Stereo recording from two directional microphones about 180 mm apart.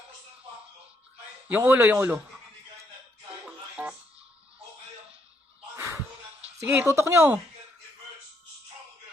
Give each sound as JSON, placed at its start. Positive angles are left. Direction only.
{"t": 1.5, "sound": "speech", "side_deg": -10}
{"t": 3.4, "sound": "music", "side_deg": -5}
{"t": 5.7, "sound": "a sound", "side_deg": -15}
{"t": 6.4, "sound": "speech", "side_deg": -10}